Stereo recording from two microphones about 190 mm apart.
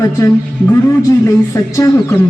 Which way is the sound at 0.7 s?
15° left (ahead or behind).